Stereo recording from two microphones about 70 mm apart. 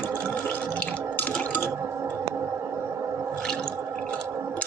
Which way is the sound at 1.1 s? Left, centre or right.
Centre.